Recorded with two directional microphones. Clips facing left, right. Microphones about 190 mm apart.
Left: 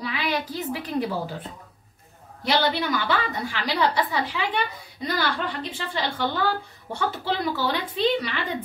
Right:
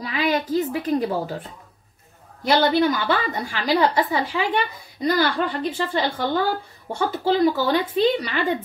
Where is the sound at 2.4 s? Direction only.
45° right (ahead or behind).